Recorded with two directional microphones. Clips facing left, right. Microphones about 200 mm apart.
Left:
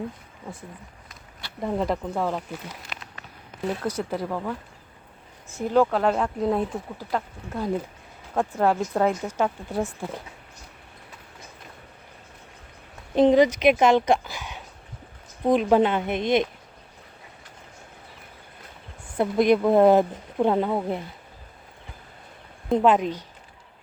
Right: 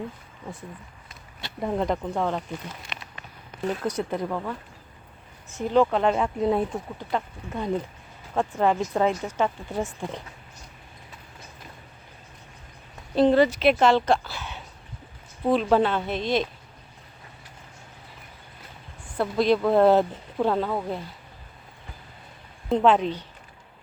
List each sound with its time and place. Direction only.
1.6 s speech: centre (ahead or behind)
5.5 s speech: 5° left (ahead or behind)
13.1 s speech: 15° left (ahead or behind)
19.1 s speech: 20° left (ahead or behind)
22.7 s speech: 10° left (ahead or behind)